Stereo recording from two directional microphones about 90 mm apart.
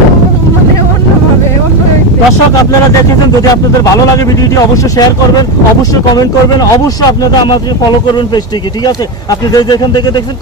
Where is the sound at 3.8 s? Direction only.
40° left (ahead or behind).